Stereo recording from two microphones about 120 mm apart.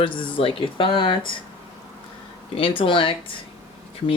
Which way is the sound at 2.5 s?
50° left (ahead or behind).